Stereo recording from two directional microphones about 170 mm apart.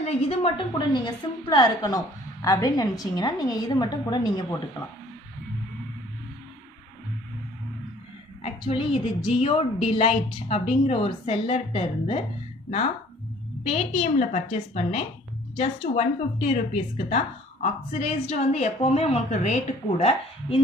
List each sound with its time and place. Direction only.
0.0 s a woman's voice: 35° left (ahead or behind)
8.9 s a woman's voice: 30° left (ahead or behind)
13.7 s a woman's voice: 40° left (ahead or behind)